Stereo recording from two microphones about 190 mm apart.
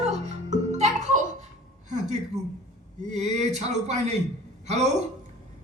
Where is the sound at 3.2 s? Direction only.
35° right (ahead or behind).